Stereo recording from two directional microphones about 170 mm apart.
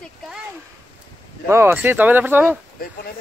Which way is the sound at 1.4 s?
15° right (ahead or behind).